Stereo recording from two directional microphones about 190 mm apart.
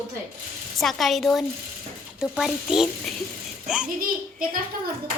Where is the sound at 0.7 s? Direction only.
Centre (ahead or behind).